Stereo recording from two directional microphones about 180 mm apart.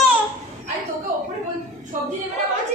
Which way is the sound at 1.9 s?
45° right (ahead or behind).